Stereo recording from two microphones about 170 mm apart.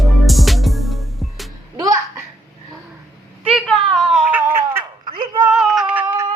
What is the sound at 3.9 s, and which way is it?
Laughter, centre (ahead or behind).